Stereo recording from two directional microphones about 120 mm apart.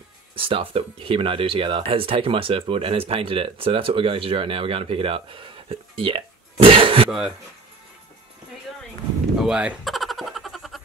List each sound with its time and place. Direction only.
0.4 s speech: 50° right (ahead or behind)
7.1 s speech: 5° right (ahead or behind)
9.4 s a sound: 5° right (ahead or behind)